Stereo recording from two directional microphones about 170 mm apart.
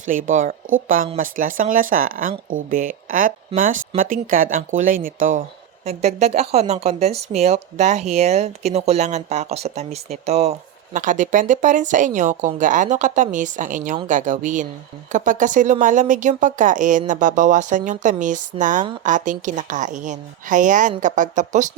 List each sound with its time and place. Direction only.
0.0 s speech: 50° right (ahead or behind)